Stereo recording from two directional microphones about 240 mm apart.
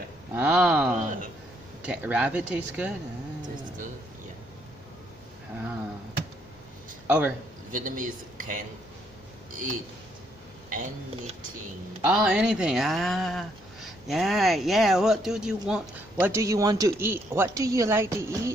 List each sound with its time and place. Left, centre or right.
0.3 s speech: centre
7.1 s a man's voice: centre
7.7 s speech: right
10.7 s speech: right
12.0 s speech: centre